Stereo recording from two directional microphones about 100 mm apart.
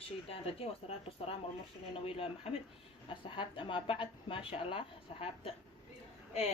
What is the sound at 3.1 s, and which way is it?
Speech, 55° left (ahead or behind).